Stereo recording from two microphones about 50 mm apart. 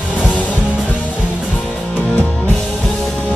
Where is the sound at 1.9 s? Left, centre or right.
Left.